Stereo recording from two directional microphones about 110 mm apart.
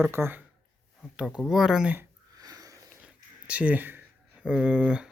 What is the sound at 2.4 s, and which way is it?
Sniff, 35° right (ahead or behind).